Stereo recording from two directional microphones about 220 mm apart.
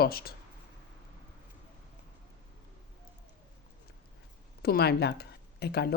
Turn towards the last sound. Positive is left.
turn(degrees=45)  # may be behind; listen again after turning